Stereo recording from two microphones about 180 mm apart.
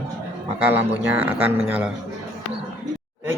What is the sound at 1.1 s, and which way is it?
Speech, 10° right (ahead or behind).